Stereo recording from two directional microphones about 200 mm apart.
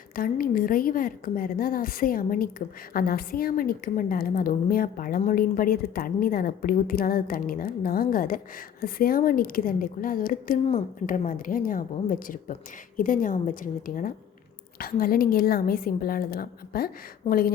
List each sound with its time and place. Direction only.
0.2 s a woman's voice: 45° left (ahead or behind)